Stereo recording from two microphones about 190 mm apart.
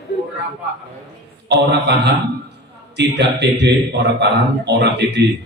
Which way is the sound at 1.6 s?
65° right (ahead or behind).